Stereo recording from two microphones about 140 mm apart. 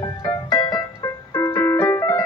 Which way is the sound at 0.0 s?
25° left (ahead or behind).